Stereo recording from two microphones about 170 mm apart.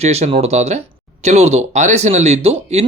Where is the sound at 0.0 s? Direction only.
40° right (ahead or behind).